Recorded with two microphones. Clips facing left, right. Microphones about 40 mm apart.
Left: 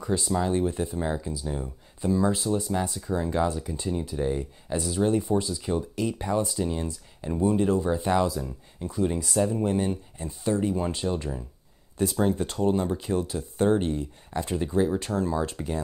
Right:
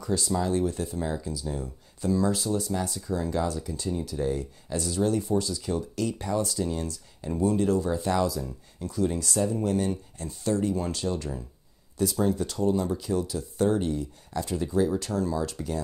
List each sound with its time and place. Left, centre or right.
0.0 s speech: left
12.0 s speech: left